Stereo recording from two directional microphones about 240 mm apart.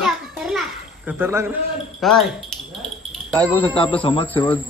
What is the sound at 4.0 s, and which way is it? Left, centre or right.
Speech, left.